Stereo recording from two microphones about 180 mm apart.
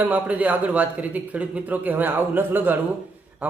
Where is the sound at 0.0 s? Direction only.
10° right (ahead or behind).